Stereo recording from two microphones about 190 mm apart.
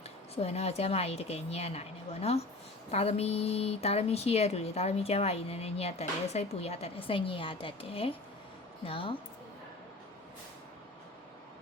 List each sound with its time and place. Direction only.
0.3 s a woman's voice: 35° left (ahead or behind)